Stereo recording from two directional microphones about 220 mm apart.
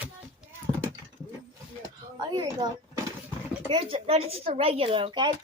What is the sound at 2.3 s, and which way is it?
Speech, 20° right (ahead or behind).